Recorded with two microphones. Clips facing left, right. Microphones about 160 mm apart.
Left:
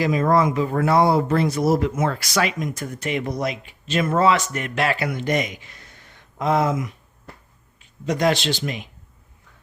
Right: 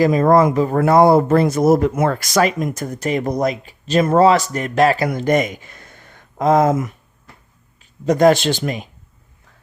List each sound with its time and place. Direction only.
0.0 s speech: 45° right (ahead or behind)